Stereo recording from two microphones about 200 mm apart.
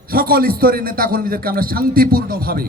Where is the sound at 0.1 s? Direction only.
45° right (ahead or behind).